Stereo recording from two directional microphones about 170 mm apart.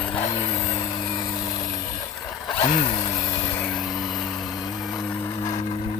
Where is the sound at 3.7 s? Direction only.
Centre (ahead or behind).